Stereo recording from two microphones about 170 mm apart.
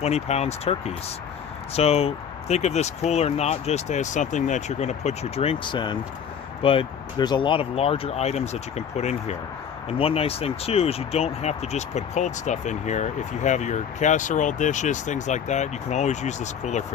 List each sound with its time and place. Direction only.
0.0 s speech: 40° left (ahead or behind)